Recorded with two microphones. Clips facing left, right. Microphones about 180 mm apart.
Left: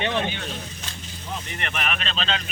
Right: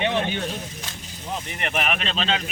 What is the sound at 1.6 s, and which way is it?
Speech, 15° right (ahead or behind).